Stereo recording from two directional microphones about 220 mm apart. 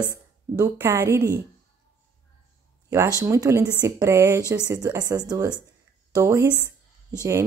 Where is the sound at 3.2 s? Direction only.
15° right (ahead or behind).